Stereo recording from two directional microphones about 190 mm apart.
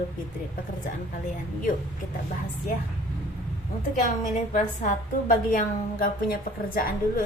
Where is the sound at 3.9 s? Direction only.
45° left (ahead or behind).